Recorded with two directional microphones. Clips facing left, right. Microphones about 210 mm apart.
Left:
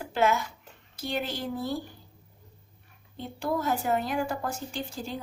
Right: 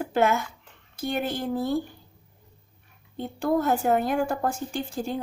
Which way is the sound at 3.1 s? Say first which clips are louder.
Right 6 dB; 50° right (ahead or behind).